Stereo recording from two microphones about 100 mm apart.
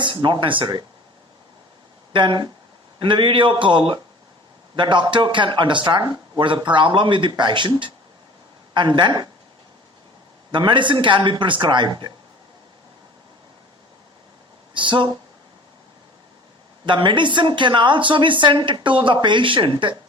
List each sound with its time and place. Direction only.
0.0 s a woman's voice: 55° right (ahead or behind)
2.1 s a woman's voice: 50° right (ahead or behind)
6.4 s a woman's voice: 55° right (ahead or behind)
10.5 s a woman's voice: 50° right (ahead or behind)
14.7 s speech: 55° right (ahead or behind)
16.8 s a woman's voice: 50° right (ahead or behind)